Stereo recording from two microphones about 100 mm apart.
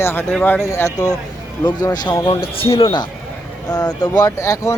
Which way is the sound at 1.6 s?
45° left (ahead or behind).